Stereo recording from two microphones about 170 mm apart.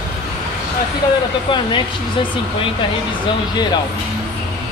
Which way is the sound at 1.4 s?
30° left (ahead or behind).